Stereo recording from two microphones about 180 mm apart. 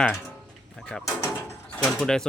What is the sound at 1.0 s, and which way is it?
Speech, 15° left (ahead or behind).